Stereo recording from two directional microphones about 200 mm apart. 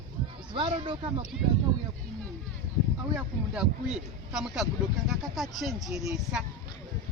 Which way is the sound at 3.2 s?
5° right (ahead or behind).